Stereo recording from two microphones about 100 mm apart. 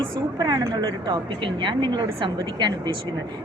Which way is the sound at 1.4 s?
55° right (ahead or behind).